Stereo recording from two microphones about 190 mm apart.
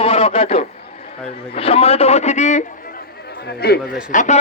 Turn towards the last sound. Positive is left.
turn(degrees=40)  # may be behind; listen again after turning